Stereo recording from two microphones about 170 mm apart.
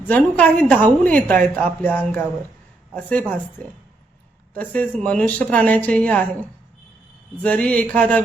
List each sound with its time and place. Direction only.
0.1 s a woman's voice: 10° left (ahead or behind)
4.5 s a woman's voice: 10° left (ahead or behind)
7.4 s a woman's voice: 10° left (ahead or behind)